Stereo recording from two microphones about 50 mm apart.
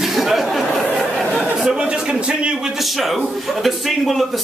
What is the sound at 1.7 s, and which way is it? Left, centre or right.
Speech, centre.